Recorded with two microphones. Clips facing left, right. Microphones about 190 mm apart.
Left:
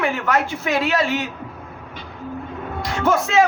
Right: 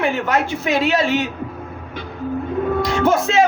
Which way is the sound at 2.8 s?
20° right (ahead or behind).